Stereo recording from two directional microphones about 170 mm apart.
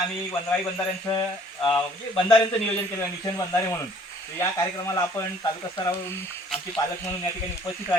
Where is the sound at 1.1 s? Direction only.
30° left (ahead or behind).